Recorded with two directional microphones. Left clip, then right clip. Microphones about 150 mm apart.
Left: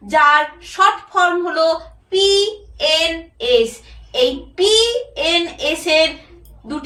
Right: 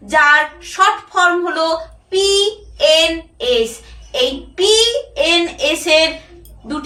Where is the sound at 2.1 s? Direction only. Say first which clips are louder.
Even; 15° right (ahead or behind).